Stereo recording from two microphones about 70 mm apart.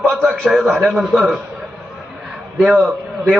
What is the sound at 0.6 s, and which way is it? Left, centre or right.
Speech, centre.